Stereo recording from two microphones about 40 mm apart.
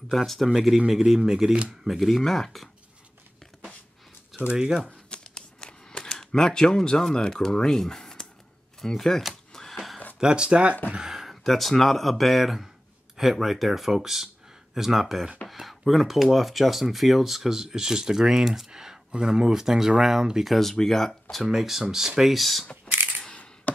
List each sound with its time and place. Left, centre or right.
0.5 s speech: centre
1.9 s speech: centre
4.3 s speech: centre
4.8 s a sound: left
8.8 s speech: centre
9.3 s a sound: centre
10.1 s speech: right
11.1 s a sound: centre
11.4 s speech: centre
20.7 s speech: centre
21.1 s speech: centre
22.8 s a sound: right
23.2 s coin: left